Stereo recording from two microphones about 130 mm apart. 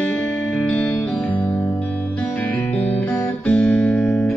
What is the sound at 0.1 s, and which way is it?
Music, 10° left (ahead or behind).